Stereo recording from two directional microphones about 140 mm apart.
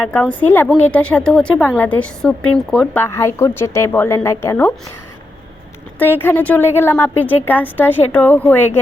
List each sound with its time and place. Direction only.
0.0 s a woman's voice: 10° left (ahead or behind)
3.0 s a woman's voice: 20° left (ahead or behind)
6.0 s a woman's voice: 15° left (ahead or behind)